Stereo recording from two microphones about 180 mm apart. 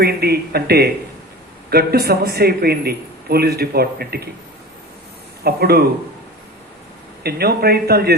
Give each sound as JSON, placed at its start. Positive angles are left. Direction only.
{"t": 0.0, "sound": "a man's voice", "side_deg": -60}
{"t": 5.4, "sound": "speech", "side_deg": -60}
{"t": 7.2, "sound": "a man's voice", "side_deg": -60}